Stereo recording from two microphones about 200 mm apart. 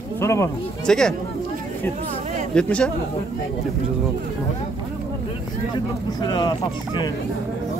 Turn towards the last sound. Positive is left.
turn(degrees=20)  # may be behind; listen again after turning